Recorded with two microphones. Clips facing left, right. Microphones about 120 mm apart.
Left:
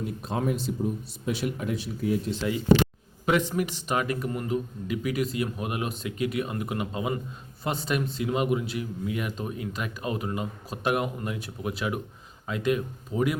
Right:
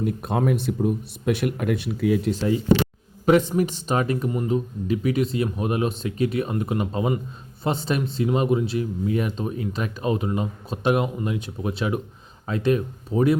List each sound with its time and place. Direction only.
0.0 s speech: 55° right (ahead or behind); by 2.3 s 90° right
2.3 s speech: 40° right (ahead or behind)